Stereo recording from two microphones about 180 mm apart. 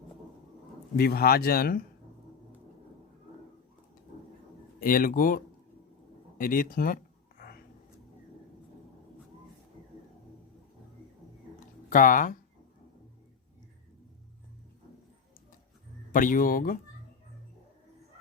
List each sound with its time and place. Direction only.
0.9 s speech: 60° left (ahead or behind)
4.8 s speech: 50° left (ahead or behind)
6.3 s a sound: 50° left (ahead or behind)
11.9 s speech: 50° left (ahead or behind)
16.1 s speech: 50° left (ahead or behind)